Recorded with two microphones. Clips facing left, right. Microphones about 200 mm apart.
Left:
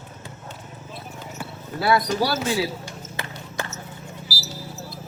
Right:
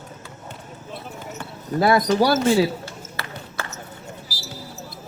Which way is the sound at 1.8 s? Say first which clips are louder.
Right 3 dB; 45° right (ahead or behind).